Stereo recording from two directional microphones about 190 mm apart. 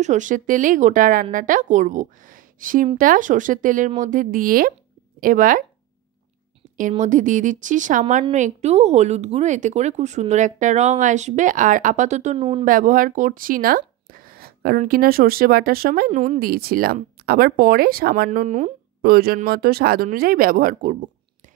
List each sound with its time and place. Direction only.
0.0 s speech: 40° right (ahead or behind)
6.9 s speech: 40° right (ahead or behind)
12.4 s speech: 30° right (ahead or behind)
12.6 s speech: 45° right (ahead or behind)
16.1 s speech: 40° right (ahead or behind)
16.3 s speech: 55° right (ahead or behind)
18.9 s speech: 55° right (ahead or behind)